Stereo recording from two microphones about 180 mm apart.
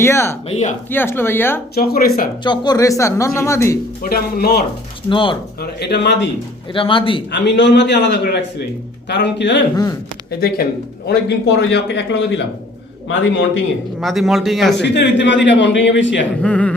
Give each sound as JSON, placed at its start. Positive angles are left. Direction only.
{"t": 0.0, "sound": "speech", "side_deg": 15}
{"t": 0.4, "sound": "speech", "side_deg": 40}
{"t": 0.9, "sound": "speech", "side_deg": 10}
{"t": 1.7, "sound": "speech", "side_deg": 60}
{"t": 2.4, "sound": "speech", "side_deg": 25}
{"t": 4.0, "sound": "speech", "side_deg": 60}
{"t": 5.0, "sound": "speech", "side_deg": 25}
{"t": 5.5, "sound": "a man's voice", "side_deg": 65}
{"t": 6.7, "sound": "speech", "side_deg": 30}
{"t": 7.3, "sound": "a man's voice", "side_deg": 75}
{"t": 10.4, "sound": "a man's voice", "side_deg": 60}
{"t": 14.0, "sound": "a man's voice", "side_deg": 0}
{"t": 14.8, "sound": "a man's voice", "side_deg": 75}
{"t": 16.4, "sound": "speech", "side_deg": 5}